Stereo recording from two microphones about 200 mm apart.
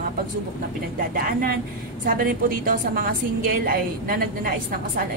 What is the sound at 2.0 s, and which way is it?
A woman's voice, 45° right (ahead or behind).